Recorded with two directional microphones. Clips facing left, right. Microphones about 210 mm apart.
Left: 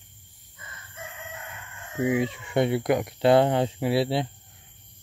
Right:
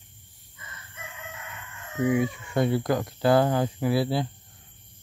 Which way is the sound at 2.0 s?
25° left (ahead or behind).